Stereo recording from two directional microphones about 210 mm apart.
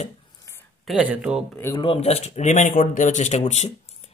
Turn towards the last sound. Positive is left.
turn(degrees=30)  # may be behind; listen again after turning